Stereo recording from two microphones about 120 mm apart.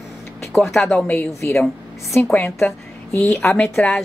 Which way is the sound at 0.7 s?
Centre (ahead or behind).